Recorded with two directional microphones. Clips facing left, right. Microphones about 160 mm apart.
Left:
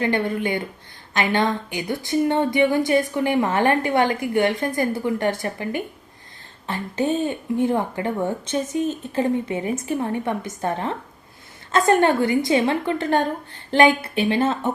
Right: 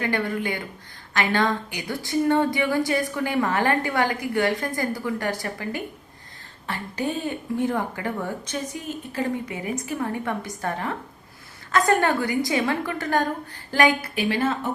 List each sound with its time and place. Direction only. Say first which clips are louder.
0.0 s a woman's voice: left 3 dB; 20° left (ahead or behind)